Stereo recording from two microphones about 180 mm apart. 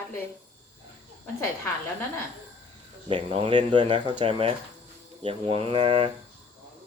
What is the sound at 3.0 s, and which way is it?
Speech, 30° right (ahead or behind).